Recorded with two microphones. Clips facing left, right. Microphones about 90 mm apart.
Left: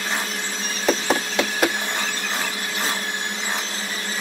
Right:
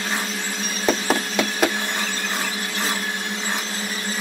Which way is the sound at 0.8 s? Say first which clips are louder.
Even; 5° right (ahead or behind).